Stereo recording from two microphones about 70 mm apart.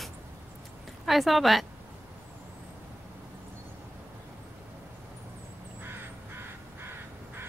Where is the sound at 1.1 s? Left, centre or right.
Centre.